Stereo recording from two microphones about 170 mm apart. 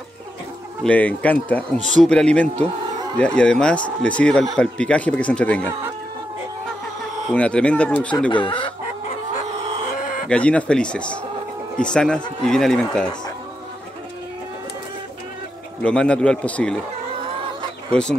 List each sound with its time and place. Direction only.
0.8 s speech: 10° left (ahead or behind)
1.8 s speech: 45° right (ahead or behind)
2.0 s speech: 5° left (ahead or behind)
7.3 s speech: 5° left (ahead or behind)
8.3 s chicken: 30° left (ahead or behind)
9.9 s livestock: 50° left (ahead or behind)
10.2 s speech: 5° left (ahead or behind)
15.8 s speech: 5° left (ahead or behind)